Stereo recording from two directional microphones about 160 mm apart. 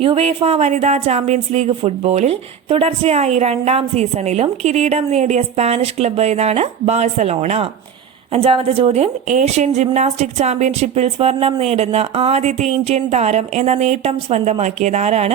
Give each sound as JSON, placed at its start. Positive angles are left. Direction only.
{"t": 0.0, "sound": "a woman's voice", "side_deg": -35}